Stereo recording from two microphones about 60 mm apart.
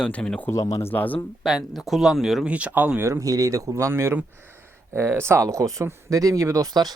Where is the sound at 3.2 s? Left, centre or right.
Right.